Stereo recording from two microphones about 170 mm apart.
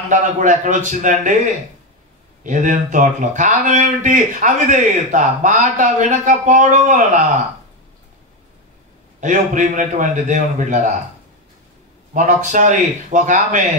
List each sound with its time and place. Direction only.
0.1 s speech: 45° right (ahead or behind)
2.4 s speech: 45° right (ahead or behind)
9.2 s speech: 50° right (ahead or behind)
12.1 s speech: 50° right (ahead or behind)